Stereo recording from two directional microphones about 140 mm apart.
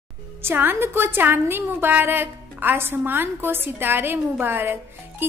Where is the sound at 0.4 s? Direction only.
15° right (ahead or behind).